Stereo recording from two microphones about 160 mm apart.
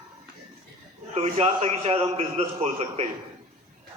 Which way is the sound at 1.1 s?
40° right (ahead or behind).